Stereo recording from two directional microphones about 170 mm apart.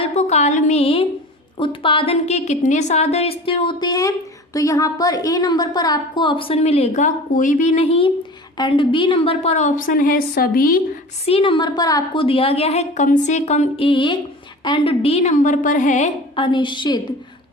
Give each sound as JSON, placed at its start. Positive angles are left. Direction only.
{"t": 0.0, "sound": "a sound", "side_deg": 40}
{"t": 1.5, "sound": "a woman's voice", "side_deg": 30}
{"t": 11.3, "sound": "a woman's voice", "side_deg": 30}
{"t": 12.2, "sound": "a woman's voice", "side_deg": 35}
{"t": 16.3, "sound": "a woman's voice", "side_deg": 30}